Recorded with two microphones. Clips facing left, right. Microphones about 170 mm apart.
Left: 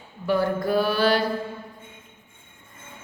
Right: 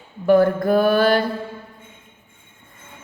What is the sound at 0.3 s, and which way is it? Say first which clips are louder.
Speech: right 7 dB; 50° right (ahead or behind).